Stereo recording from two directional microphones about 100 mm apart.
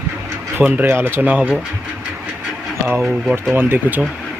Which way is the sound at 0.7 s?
25° right (ahead or behind).